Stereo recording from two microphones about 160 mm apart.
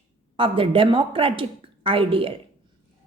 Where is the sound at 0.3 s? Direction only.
35° right (ahead or behind).